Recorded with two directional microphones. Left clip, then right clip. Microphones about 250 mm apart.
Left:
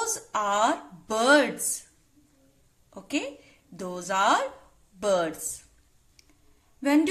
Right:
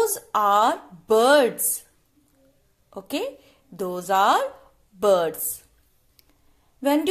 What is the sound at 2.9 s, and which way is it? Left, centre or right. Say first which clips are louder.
A woman's voice: right 3 dB; centre.